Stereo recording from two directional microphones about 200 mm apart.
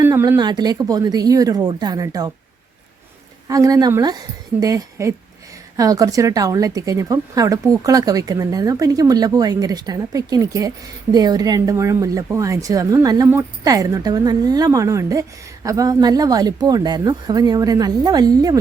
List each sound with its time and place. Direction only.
0.0 s speech: 15° right (ahead or behind)
3.5 s speech: 15° right (ahead or behind)